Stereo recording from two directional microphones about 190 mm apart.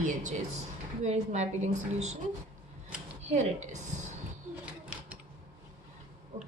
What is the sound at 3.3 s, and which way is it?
Speech, 40° right (ahead or behind).